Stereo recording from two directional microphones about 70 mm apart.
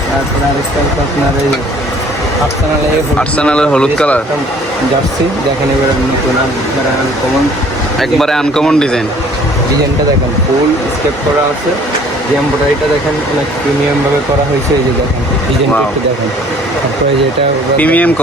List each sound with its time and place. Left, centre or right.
3.2 s speech: centre
7.9 s speech: centre
17.7 s speech: left